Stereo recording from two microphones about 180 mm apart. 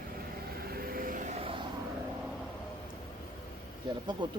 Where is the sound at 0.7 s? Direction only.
55° right (ahead or behind); by 1.5 s 35° right (ahead or behind).